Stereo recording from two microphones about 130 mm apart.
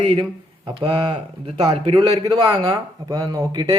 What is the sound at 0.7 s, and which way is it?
Speech, 40° right (ahead or behind).